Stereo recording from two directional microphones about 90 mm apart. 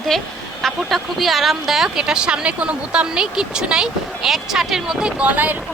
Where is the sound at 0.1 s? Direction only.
5° left (ahead or behind).